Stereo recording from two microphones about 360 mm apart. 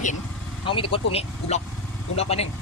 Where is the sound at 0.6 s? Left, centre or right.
Centre.